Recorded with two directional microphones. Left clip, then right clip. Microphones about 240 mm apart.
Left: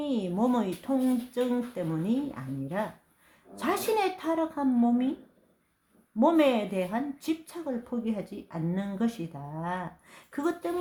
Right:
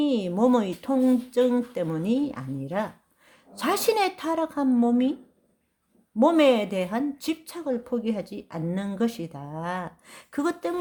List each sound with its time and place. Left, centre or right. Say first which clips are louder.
0.0 s a woman's voice: right 6 dB; right
6.1 s a woman's voice: right 4 dB; right